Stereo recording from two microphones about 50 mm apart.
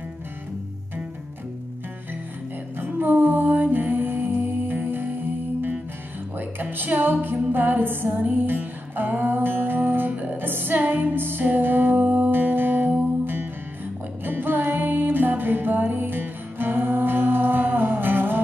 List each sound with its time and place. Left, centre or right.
2.8 s music: right